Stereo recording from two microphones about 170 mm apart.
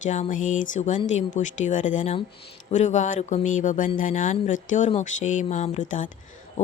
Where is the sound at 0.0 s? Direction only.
45° left (ahead or behind).